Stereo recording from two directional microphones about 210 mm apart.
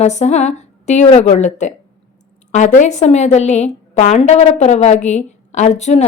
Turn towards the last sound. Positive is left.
turn(degrees=30)  # may be behind; listen again after turning